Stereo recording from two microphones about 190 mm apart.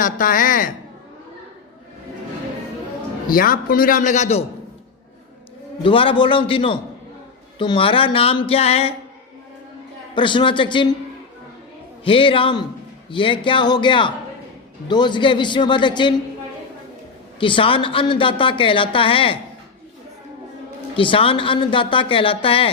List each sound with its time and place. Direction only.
0.0 s a man's voice: 45° left (ahead or behind)
3.2 s a man's voice: 50° left (ahead or behind)
5.8 s a woman's voice: 30° left (ahead or behind)
10.2 s a woman's voice: 25° left (ahead or behind)
12.0 s a woman's voice: 30° left (ahead or behind)
17.4 s a woman's voice: 25° left (ahead or behind)
20.9 s a woman's voice: 25° left (ahead or behind)